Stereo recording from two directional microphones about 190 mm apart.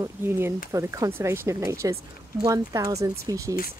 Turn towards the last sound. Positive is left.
turn(degrees=-15)  # may be behind; listen again after turning